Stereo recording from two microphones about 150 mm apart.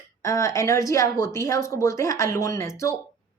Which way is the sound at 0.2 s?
20° left (ahead or behind).